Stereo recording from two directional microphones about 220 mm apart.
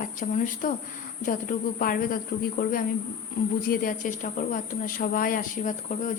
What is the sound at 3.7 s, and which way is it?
Speech, 35° left (ahead or behind).